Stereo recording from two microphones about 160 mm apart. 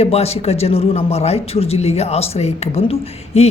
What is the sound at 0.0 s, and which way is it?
A man's voice, 40° left (ahead or behind).